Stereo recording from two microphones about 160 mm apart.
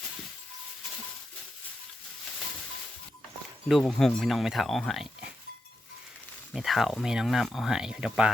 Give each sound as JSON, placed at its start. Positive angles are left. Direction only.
{"t": 3.7, "sound": "speech", "side_deg": 0}
{"t": 6.5, "sound": "speech", "side_deg": 0}